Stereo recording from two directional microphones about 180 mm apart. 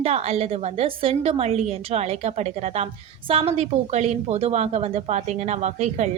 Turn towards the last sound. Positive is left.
turn(degrees=-40)  # may be behind; listen again after turning